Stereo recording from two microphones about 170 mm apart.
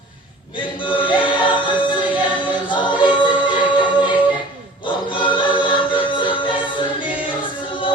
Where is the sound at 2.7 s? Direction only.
25° left (ahead or behind).